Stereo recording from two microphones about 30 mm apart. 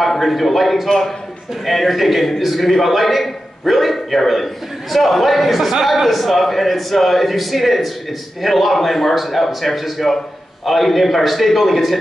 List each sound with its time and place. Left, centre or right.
0.2 s a man's voice: centre
0.8 s a man's voice: centre
1.7 s a man's voice: centre